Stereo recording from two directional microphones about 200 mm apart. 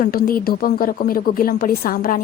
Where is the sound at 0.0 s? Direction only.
45° left (ahead or behind).